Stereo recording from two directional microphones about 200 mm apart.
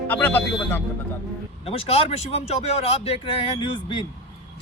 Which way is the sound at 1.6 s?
30° left (ahead or behind).